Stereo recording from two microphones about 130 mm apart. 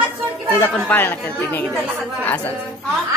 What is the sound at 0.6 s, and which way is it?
Speech, 15° left (ahead or behind).